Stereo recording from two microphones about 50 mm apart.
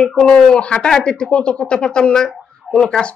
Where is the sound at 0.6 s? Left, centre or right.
Left.